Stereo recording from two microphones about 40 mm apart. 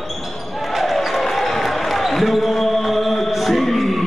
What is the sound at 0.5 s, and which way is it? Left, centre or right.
Basketball bounce, centre.